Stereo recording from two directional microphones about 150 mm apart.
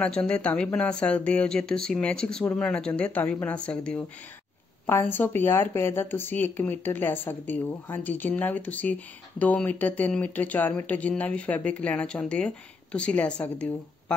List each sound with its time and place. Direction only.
0.0 s speech: 5° left (ahead or behind)